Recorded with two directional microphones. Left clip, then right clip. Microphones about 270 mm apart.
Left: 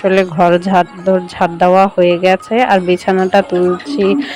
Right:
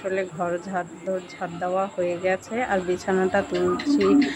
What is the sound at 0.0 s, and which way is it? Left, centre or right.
Speech, left.